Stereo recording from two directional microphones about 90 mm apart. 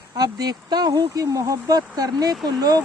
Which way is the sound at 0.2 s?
50° right (ahead or behind).